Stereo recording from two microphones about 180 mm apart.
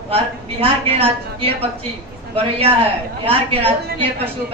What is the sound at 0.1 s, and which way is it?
A woman's voice, 35° right (ahead or behind).